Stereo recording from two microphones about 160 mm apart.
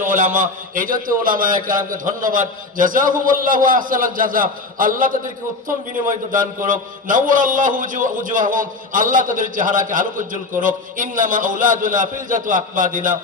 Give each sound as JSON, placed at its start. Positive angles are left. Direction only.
{"t": 0.0, "sound": "a man's voice", "side_deg": -55}